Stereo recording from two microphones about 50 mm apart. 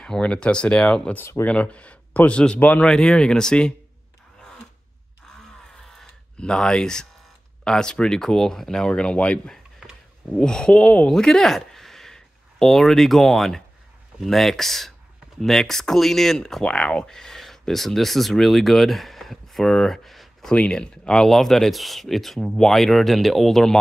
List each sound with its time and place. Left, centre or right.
0.2 s speech: left
2.9 s speech: centre
6.3 s speech: centre
9.8 s a sound: centre
10.3 s speech: centre
11.1 s speech: centre
16.6 s speech: centre
20.5 s speech: left